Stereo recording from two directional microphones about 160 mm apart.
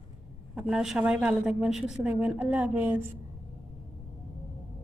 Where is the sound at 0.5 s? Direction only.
5° right (ahead or behind).